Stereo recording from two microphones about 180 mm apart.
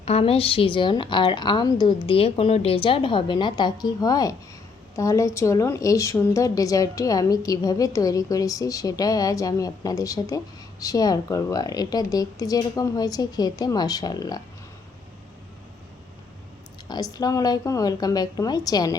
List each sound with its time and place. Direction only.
0.0 s a woman's voice: 35° left (ahead or behind)
16.9 s a woman's voice: 20° left (ahead or behind)